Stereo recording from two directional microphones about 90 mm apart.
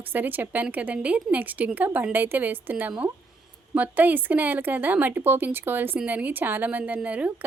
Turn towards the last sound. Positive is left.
turn(degrees=-15)  # may be behind; listen again after turning